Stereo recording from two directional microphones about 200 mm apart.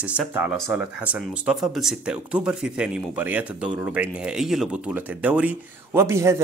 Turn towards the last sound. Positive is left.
turn(degrees=-15)  # may be behind; listen again after turning